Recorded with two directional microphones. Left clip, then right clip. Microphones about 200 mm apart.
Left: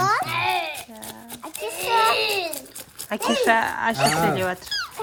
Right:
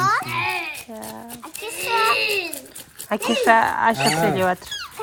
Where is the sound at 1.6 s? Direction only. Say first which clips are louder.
Even; 45° left (ahead or behind).